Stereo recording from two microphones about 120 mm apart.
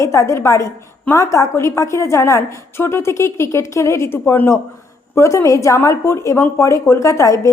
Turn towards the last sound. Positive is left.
turn(degrees=25)  # may be behind; listen again after turning